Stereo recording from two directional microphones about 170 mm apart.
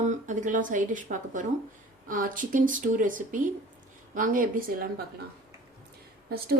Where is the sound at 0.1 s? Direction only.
50° right (ahead or behind).